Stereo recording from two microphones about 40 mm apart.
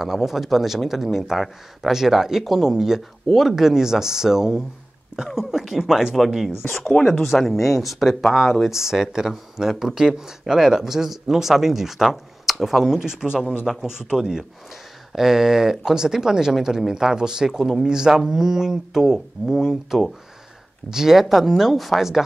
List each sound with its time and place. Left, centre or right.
0.0 s speech: centre
6.2 s speech: centre
13.0 s speech: centre